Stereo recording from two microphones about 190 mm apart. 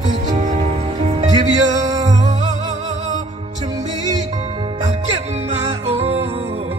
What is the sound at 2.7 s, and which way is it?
Music, 40° right (ahead or behind).